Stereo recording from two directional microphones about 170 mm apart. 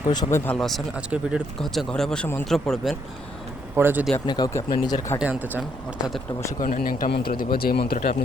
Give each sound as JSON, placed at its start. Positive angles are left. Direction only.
{"t": 0.1, "sound": "speech", "side_deg": 20}
{"t": 0.5, "sound": "speech", "side_deg": 0}
{"t": 3.8, "sound": "speech", "side_deg": -10}
{"t": 4.3, "sound": "speech", "side_deg": 20}
{"t": 5.2, "sound": "speech", "side_deg": -10}
{"t": 6.6, "sound": "speech", "side_deg": 55}